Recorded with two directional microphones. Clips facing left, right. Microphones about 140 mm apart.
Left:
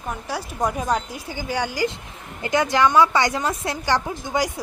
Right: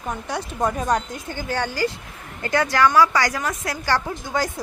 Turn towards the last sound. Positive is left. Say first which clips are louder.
# left 1 dB
turn(degrees=15)  # may be behind; listen again after turning